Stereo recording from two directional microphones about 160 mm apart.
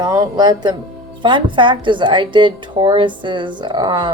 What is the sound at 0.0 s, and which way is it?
Speech, 25° right (ahead or behind).